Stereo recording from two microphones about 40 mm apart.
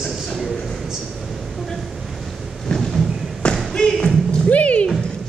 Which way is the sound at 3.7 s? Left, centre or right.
Left.